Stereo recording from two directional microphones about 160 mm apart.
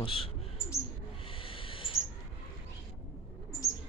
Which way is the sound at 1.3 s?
35° left (ahead or behind).